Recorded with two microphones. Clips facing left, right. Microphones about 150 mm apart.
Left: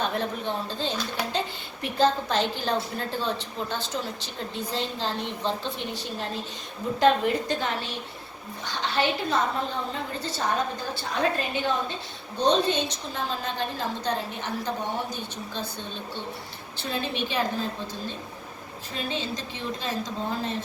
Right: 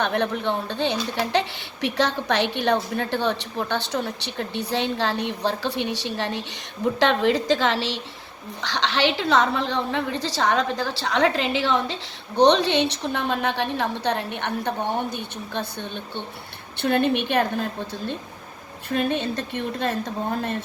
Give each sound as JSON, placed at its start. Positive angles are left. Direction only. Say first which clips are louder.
{"t": 0.0, "sound": "speech", "louder": "right 5 dB", "side_deg": -70}
{"t": 7.0, "sound": "a woman's voice", "louder": "right 1 dB", "side_deg": -90}
{"t": 12.4, "sound": "a woman's voice", "louder": "right 6 dB", "side_deg": -75}
{"t": 18.9, "sound": "a woman's voice", "louder": "right 8 dB", "side_deg": -60}